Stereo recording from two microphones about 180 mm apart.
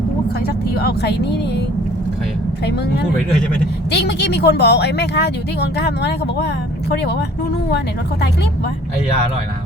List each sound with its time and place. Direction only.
0.4 s speech: 60° left (ahead or behind)
2.6 s speech: 70° left (ahead or behind)